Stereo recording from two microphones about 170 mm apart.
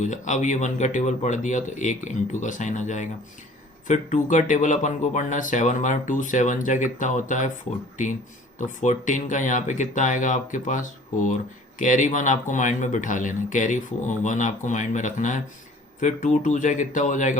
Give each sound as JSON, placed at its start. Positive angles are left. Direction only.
{"t": 0.0, "sound": "speech", "side_deg": 45}
{"t": 8.5, "sound": "speech", "side_deg": 45}